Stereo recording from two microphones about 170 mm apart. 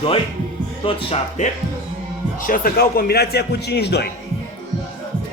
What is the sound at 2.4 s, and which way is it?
A man's voice, 55° left (ahead or behind).